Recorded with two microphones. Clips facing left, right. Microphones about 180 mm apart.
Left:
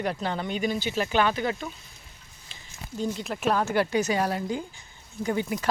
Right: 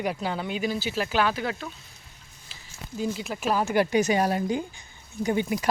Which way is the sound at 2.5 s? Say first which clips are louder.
Left 1 dB; 5° right (ahead or behind).